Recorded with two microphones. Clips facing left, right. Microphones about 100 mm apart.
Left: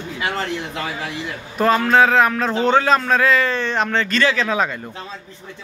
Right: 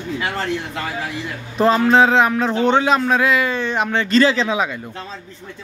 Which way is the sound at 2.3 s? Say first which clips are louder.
Right 1 dB; 10° right (ahead or behind).